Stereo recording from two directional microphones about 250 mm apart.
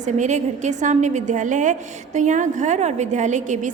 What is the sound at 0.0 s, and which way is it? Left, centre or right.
A woman's voice, right.